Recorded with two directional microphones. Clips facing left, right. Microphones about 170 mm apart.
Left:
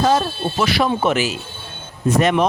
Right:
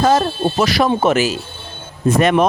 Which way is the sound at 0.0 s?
45° right (ahead or behind).